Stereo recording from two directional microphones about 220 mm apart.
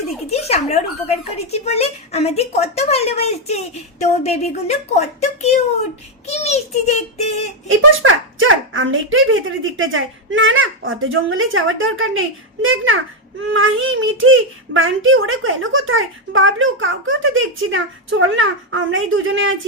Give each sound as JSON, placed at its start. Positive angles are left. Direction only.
{"t": 0.3, "sound": "speech", "side_deg": 30}
{"t": 7.7, "sound": "a child's voice", "side_deg": -65}